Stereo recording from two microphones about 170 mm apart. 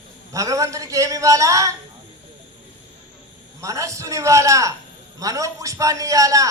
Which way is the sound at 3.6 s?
20° right (ahead or behind).